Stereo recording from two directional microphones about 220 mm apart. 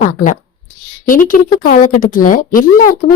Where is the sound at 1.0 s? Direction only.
40° left (ahead or behind).